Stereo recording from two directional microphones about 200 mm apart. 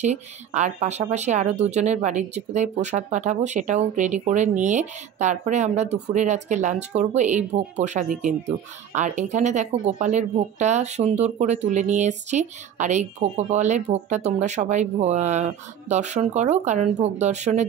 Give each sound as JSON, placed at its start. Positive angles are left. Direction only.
{"t": 0.0, "sound": "speech", "side_deg": -35}